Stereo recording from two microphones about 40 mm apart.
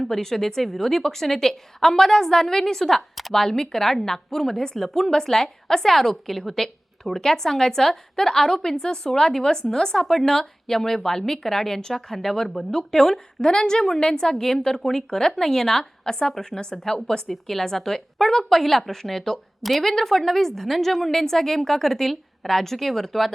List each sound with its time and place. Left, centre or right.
0.0 s a woman's voice: centre